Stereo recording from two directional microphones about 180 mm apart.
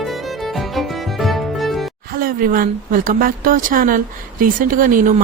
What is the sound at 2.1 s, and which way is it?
A woman's voice, 50° right (ahead or behind).